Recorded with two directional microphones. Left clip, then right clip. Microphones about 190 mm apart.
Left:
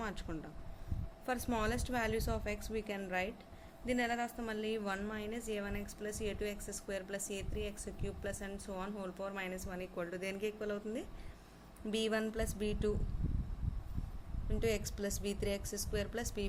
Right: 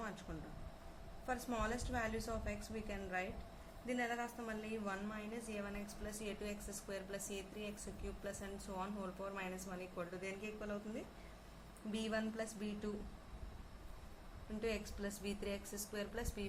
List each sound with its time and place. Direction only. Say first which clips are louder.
0.3 s a woman's voice: left 5 dB; 45° left (ahead or behind)
11.9 s a woman's voice: left 6 dB; 45° left (ahead or behind)
14.6 s a woman's voice: left 6 dB; 40° left (ahead or behind)